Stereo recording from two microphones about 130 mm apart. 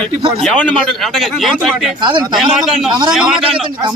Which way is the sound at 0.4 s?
5° left (ahead or behind).